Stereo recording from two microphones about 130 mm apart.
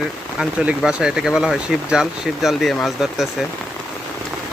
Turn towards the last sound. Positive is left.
turn(degrees=0)  # may be behind; listen again after turning